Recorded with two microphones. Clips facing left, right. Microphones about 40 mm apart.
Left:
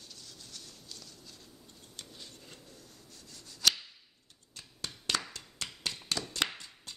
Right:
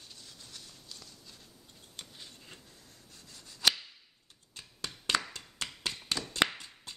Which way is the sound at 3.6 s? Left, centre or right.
Centre.